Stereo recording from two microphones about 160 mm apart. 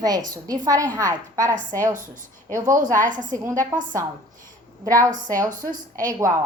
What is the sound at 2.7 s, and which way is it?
Speech, 55° right (ahead or behind).